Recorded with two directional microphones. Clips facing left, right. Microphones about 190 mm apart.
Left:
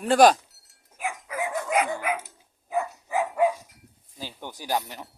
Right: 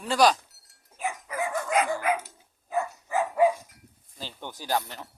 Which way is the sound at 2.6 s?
15° left (ahead or behind).